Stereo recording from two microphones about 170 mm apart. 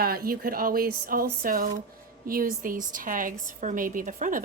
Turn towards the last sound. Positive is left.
turn(degrees=-50)  # may be behind; listen again after turning